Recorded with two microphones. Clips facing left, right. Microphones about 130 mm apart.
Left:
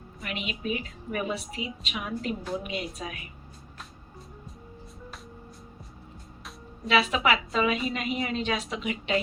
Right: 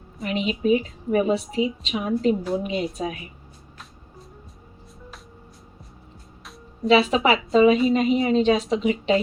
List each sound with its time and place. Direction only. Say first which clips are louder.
0.2 s a woman's voice: right 10 dB; 30° right (ahead or behind)
6.8 s a woman's voice: right 6 dB; 30° right (ahead or behind)